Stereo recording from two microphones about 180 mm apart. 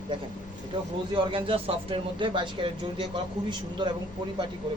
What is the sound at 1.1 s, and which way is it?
Speech, 30° right (ahead or behind).